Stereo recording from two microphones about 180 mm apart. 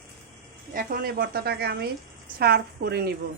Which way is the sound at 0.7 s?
50° right (ahead or behind).